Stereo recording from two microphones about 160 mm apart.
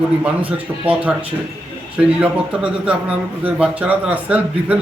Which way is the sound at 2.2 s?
5° right (ahead or behind).